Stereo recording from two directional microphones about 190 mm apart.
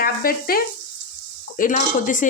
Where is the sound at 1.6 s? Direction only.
45° left (ahead or behind).